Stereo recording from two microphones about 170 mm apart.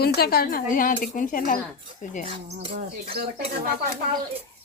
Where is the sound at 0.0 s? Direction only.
65° left (ahead or behind).